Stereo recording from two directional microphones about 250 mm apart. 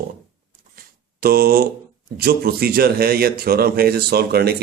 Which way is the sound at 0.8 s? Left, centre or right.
Right.